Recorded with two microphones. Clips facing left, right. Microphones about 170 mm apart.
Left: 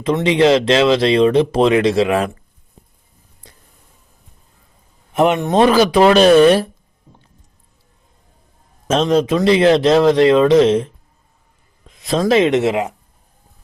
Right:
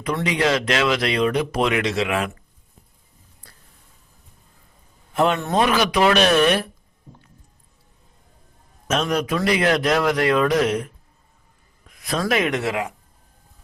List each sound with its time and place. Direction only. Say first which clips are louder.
0.0 s speech: left 8 dB; 25° left (ahead or behind)
3.4 s a sound: left 6 dB; 20° left (ahead or behind)
5.1 s speech: left 6 dB; 20° left (ahead or behind)
8.9 s speech: left 7 dB; 25° left (ahead or behind)